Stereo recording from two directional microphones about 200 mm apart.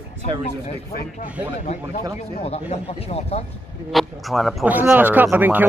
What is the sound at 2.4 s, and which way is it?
Speech, 30° left (ahead or behind).